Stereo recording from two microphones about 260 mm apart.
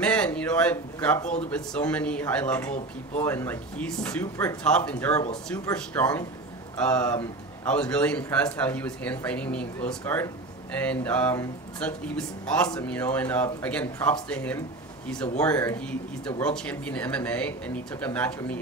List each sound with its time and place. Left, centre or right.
0.0 s a man's voice: centre
5.1 s speech: left
5.5 s a man's voice: centre